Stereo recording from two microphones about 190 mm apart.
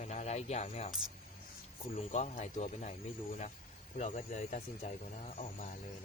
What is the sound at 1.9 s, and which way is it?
Speech, 35° left (ahead or behind).